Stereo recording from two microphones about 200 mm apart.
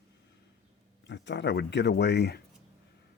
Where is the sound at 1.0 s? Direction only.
60° left (ahead or behind).